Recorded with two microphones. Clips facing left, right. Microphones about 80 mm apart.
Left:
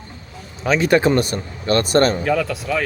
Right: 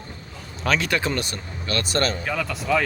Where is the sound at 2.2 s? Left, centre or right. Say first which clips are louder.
Left 7 dB; centre.